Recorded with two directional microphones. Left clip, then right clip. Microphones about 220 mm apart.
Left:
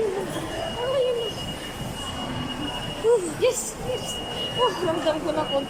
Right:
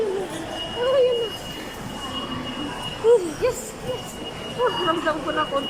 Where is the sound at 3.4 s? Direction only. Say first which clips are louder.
Left 1 dB; 10° left (ahead or behind).